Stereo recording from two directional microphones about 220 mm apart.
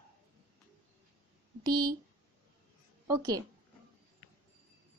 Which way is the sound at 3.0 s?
15° right (ahead or behind).